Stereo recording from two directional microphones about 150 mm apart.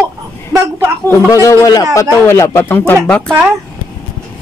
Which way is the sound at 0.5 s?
15° right (ahead or behind).